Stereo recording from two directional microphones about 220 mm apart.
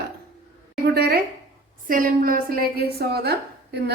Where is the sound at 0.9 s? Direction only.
45° right (ahead or behind).